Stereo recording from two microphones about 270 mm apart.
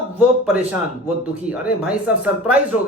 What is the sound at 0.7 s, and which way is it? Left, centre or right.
Speech, centre.